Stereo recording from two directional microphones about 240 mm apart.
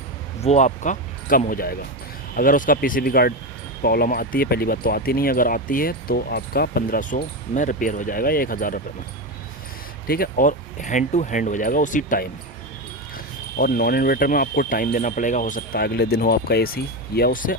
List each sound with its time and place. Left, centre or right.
0.4 s speech: left
10.1 s speech: left
13.6 s speech: left